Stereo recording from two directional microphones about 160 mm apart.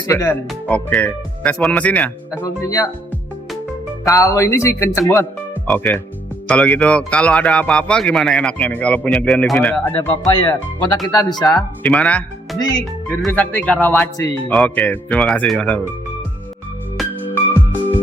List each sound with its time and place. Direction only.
0.1 s speech: 15° left (ahead or behind)
2.6 s speech: 20° left (ahead or behind)
4.0 s speech: 20° left (ahead or behind)
10.9 s speech: 25° left (ahead or behind)
11.5 s speech: 5° left (ahead or behind)
17.2 s music: 10° left (ahead or behind)